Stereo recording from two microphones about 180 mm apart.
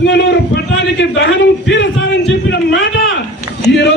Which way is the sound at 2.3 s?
85° left.